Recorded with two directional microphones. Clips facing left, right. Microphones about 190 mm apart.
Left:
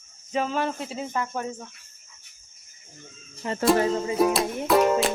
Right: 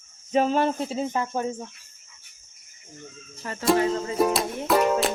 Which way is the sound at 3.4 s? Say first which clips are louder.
Left 5 dB; 20° left (ahead or behind).